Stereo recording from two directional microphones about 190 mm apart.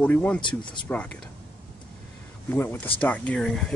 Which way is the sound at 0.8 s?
5° left (ahead or behind).